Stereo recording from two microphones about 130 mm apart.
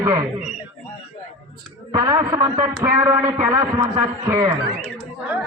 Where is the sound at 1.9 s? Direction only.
30° right (ahead or behind).